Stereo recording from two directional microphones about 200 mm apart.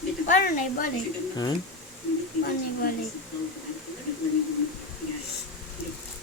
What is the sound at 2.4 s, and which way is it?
Speech, 45° left (ahead or behind).